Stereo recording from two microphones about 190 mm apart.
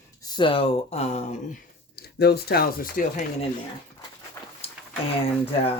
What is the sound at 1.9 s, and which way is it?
Speech, 55° left (ahead or behind).